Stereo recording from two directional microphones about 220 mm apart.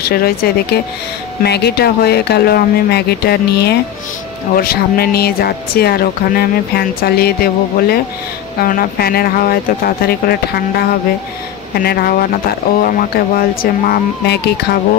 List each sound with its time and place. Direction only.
0.0 s speech: 45° left (ahead or behind)
11.8 s speech: 45° left (ahead or behind)